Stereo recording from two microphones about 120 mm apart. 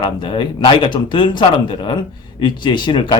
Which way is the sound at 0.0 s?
40° left (ahead or behind).